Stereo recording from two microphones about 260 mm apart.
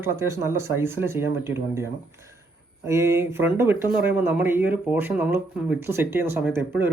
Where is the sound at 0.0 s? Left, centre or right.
Centre.